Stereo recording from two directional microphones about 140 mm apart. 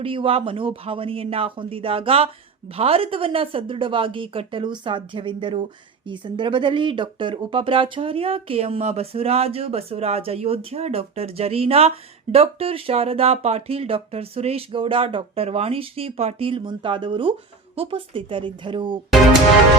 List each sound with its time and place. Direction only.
0.0 s speech: 40° right (ahead or behind)